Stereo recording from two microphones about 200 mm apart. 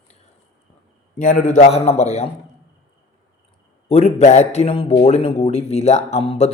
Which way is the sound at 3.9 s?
30° left (ahead or behind).